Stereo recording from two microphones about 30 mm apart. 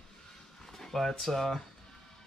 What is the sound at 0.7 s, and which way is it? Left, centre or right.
Speech, centre.